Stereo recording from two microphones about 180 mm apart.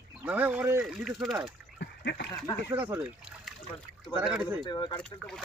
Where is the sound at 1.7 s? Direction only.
70° left (ahead or behind).